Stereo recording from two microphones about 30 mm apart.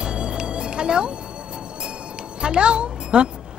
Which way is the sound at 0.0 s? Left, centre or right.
Right.